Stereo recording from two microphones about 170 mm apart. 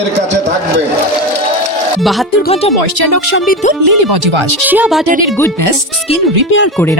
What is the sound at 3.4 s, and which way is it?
Speech, 55° left (ahead or behind).